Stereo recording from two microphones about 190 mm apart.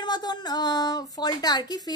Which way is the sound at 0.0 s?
20° left (ahead or behind).